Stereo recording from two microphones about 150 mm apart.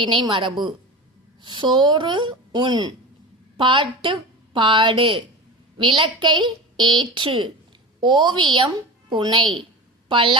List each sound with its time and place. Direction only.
0.0 s a woman's voice: 35° right (ahead or behind)